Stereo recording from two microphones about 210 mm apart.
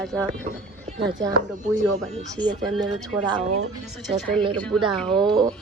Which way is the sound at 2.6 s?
Centre (ahead or behind).